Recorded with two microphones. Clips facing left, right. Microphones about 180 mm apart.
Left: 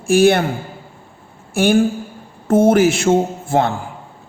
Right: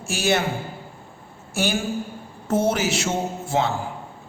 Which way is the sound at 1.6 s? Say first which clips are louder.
Left 10 dB; 55° left (ahead or behind).